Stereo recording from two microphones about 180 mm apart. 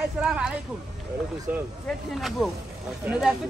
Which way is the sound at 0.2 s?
5° right (ahead or behind).